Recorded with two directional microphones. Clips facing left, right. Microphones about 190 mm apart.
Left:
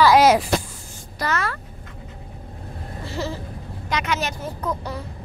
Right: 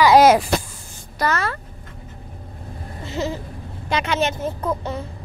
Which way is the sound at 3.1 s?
20° right (ahead or behind).